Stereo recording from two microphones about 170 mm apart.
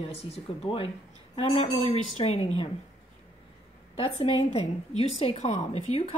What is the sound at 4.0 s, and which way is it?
A woman's voice, 40° left (ahead or behind).